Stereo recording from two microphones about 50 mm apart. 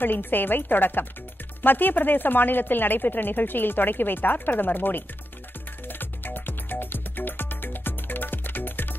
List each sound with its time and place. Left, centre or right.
0.0 s speech: left
5.9 s music: left